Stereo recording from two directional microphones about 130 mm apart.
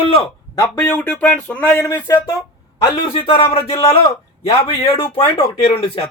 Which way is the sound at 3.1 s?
45° left (ahead or behind).